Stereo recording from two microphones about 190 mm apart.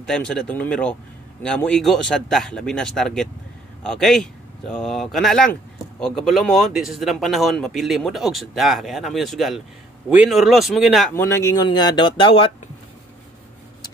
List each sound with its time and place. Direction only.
0.0 s speech: 5° left (ahead or behind)
11.1 s speech: 15° left (ahead or behind)